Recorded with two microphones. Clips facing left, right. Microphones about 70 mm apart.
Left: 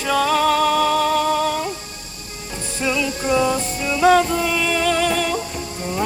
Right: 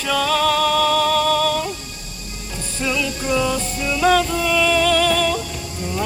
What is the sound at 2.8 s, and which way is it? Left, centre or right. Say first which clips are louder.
Music: left 1 dB; centre.